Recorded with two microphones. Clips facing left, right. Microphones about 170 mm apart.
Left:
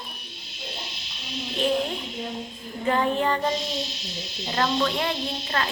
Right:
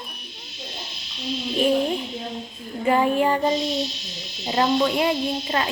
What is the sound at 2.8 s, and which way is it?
Child singing, 15° right (ahead or behind).